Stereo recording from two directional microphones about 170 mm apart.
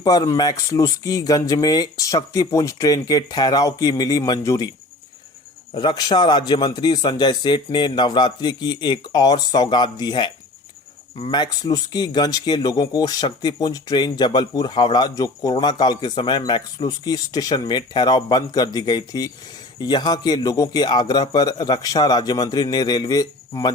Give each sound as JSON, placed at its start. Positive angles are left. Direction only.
{"t": 0.0, "sound": "speech", "side_deg": 20}
{"t": 5.7, "sound": "speech", "side_deg": 25}